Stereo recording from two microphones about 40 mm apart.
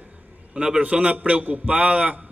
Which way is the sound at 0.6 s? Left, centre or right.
Right.